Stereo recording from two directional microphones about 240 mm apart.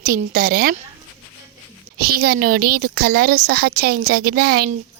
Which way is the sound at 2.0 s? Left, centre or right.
Right.